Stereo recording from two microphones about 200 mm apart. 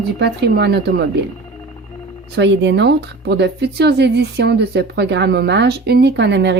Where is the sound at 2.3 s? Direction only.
60° right (ahead or behind).